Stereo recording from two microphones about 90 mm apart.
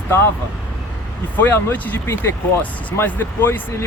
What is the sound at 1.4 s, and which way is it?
Speech, 20° left (ahead or behind).